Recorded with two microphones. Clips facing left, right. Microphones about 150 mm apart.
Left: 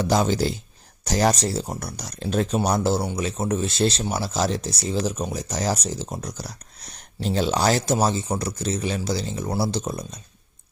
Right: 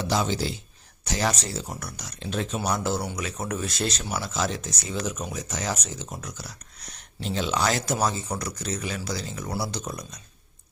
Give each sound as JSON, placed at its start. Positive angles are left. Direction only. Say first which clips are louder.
{"t": 0.0, "sound": "speech", "louder": "left 5 dB", "side_deg": 45}